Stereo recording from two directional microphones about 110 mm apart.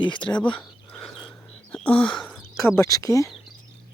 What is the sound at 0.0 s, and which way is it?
Speech, 45° left (ahead or behind).